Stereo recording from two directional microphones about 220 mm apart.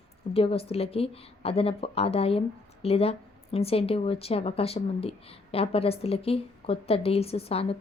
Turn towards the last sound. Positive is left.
turn(degrees=25)  # may be behind; listen again after turning